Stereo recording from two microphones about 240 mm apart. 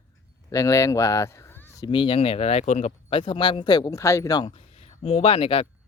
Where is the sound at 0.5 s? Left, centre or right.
Centre.